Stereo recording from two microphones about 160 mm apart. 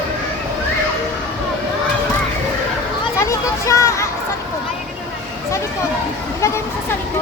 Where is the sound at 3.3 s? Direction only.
20° left (ahead or behind).